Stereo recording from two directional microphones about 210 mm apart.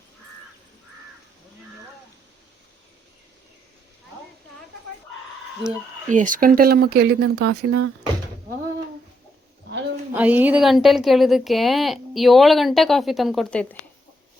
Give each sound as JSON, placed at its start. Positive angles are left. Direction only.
{"t": 6.1, "sound": "speech", "side_deg": -35}
{"t": 10.2, "sound": "a woman's voice", "side_deg": -10}